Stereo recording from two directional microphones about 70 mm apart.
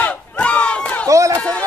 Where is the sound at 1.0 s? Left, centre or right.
Right.